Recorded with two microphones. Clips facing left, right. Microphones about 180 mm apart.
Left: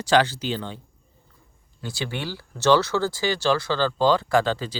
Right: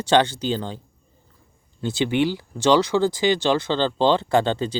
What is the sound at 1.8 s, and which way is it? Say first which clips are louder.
Speech: right 10 dB; 20° right (ahead or behind).